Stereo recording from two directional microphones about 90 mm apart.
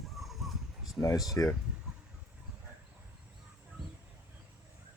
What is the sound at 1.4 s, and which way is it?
Speech, 25° left (ahead or behind).